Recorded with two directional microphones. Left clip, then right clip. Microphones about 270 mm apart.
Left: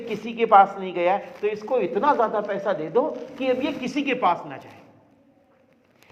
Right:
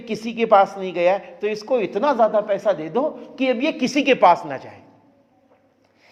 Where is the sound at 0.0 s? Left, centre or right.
Right.